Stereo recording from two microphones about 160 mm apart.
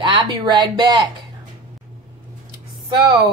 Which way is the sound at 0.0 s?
30° right (ahead or behind).